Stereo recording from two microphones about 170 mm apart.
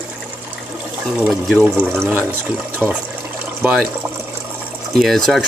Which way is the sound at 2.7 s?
10° right (ahead or behind).